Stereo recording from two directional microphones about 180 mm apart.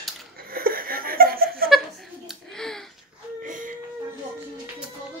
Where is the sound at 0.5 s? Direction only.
55° right (ahead or behind).